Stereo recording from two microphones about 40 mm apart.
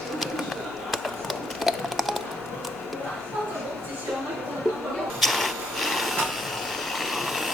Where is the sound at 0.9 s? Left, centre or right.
Centre.